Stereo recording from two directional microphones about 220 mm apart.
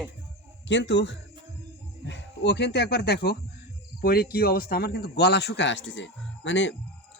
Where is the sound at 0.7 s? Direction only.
55° left (ahead or behind).